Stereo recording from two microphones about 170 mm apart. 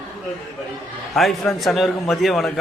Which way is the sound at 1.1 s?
Centre (ahead or behind).